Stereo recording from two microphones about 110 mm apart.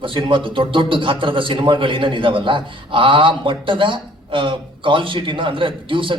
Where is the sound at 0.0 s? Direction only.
50° right (ahead or behind).